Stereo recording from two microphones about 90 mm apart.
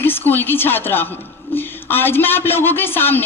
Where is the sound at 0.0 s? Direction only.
25° left (ahead or behind).